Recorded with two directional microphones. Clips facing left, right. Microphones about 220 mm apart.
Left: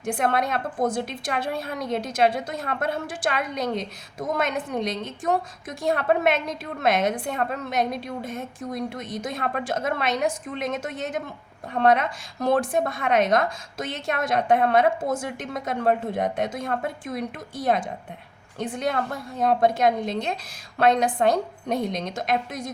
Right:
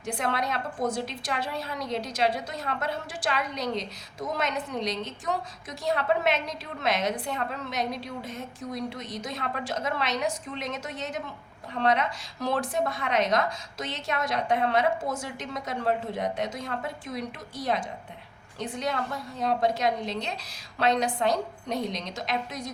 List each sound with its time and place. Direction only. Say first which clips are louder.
0.0 s a woman's voice: left 6 dB; 50° left (ahead or behind)